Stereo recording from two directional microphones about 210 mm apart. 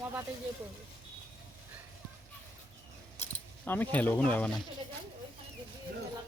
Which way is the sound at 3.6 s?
10° left (ahead or behind).